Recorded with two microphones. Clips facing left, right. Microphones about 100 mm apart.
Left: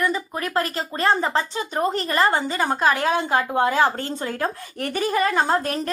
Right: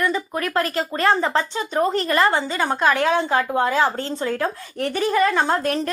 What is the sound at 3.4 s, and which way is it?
Speech, 20° left (ahead or behind).